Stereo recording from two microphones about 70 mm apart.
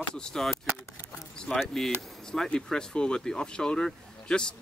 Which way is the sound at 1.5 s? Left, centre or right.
Centre.